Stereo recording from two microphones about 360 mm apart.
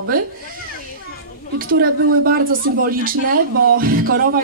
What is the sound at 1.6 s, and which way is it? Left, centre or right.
A woman's voice, right.